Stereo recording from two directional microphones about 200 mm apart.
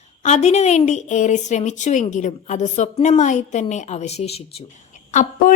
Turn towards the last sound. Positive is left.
turn(degrees=40)  # may be behind; listen again after turning